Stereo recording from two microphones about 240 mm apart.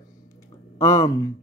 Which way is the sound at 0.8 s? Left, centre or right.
Centre.